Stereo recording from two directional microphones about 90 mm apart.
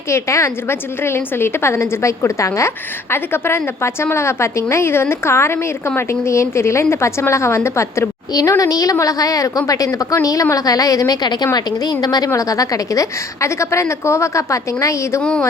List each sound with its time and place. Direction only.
0.1 s a woman's voice: 30° left (ahead or behind)
8.3 s a woman's voice: 40° left (ahead or behind)
15.2 s speech: 10° left (ahead or behind)